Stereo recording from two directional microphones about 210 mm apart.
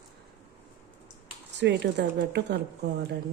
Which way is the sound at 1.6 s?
55° right (ahead or behind).